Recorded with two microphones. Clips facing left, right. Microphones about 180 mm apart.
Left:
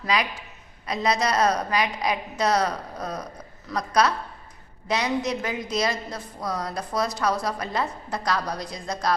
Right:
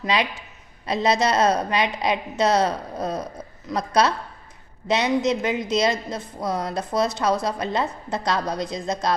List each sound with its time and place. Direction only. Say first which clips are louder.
0.0 s a woman's voice: right 2 dB; 25° right (ahead or behind)